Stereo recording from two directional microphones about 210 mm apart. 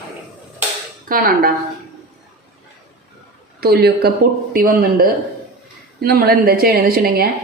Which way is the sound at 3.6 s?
50° right (ahead or behind).